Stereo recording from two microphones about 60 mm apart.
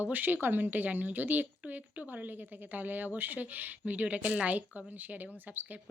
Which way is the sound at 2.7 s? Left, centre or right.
Right.